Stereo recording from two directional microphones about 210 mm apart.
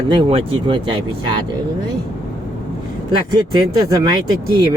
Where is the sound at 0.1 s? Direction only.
25° right (ahead or behind).